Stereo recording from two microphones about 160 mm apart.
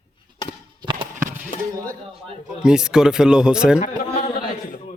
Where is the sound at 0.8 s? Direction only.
30° right (ahead or behind).